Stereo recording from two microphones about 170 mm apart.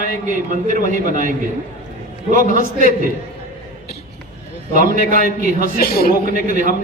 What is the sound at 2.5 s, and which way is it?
Speech, 50° right (ahead or behind).